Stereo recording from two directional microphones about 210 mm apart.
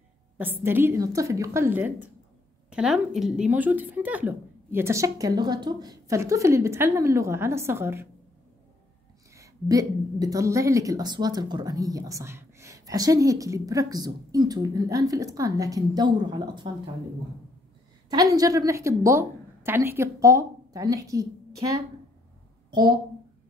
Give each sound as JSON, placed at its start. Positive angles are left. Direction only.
{"t": 0.4, "sound": "a woman's voice", "side_deg": -10}
{"t": 9.3, "sound": "a woman's voice", "side_deg": -15}
{"t": 18.1, "sound": "a woman's voice", "side_deg": -15}